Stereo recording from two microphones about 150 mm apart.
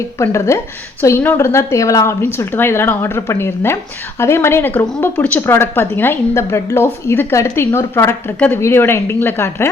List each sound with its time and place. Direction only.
0.2 s a woman's voice: 20° left (ahead or behind)